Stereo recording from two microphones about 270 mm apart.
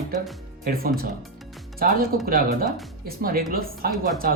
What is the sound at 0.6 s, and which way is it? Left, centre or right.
Speech, right.